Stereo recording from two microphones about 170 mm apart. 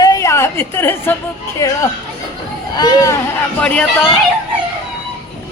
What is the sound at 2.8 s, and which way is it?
Speech, 25° left (ahead or behind).